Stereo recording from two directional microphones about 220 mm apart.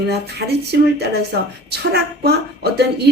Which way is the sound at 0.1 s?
50° right (ahead or behind).